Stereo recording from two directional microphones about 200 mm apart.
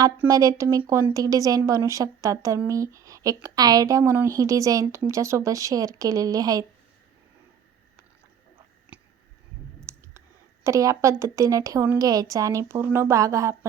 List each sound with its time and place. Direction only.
0.2 s speech: 15° right (ahead or behind)
8.9 s a sound: 5° right (ahead or behind)
10.2 s speech: 15° right (ahead or behind)